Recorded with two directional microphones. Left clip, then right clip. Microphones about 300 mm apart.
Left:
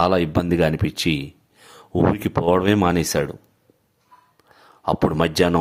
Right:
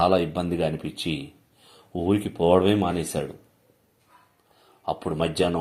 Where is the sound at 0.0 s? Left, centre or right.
Left.